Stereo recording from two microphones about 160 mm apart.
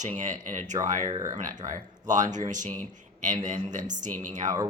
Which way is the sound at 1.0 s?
25° right (ahead or behind).